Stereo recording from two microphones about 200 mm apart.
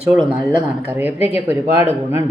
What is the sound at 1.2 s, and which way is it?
Speech, 30° left (ahead or behind).